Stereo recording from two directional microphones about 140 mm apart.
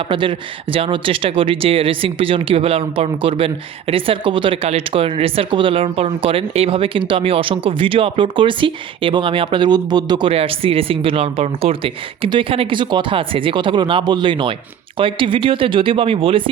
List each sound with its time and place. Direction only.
0.1 s speech: 35° right (ahead or behind)